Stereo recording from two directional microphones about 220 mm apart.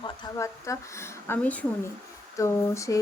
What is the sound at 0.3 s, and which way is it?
Speech, 15° left (ahead or behind).